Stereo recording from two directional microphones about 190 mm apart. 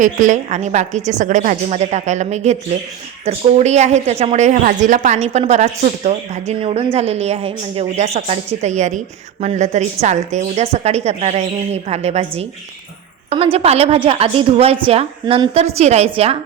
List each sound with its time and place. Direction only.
0.0 s a woman's voice: 40° right (ahead or behind)
13.3 s a woman's voice: 30° right (ahead or behind)